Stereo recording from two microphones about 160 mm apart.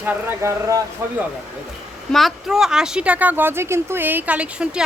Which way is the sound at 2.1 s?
Centre (ahead or behind).